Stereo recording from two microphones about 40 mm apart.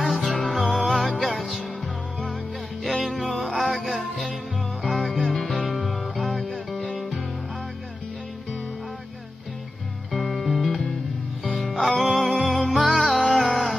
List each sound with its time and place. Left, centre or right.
0.1 s music: centre
2.8 s music: centre
10.1 s music: centre
11.8 s music: centre